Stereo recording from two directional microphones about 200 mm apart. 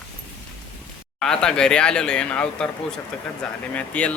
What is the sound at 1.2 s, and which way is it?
Speech, 5° left (ahead or behind).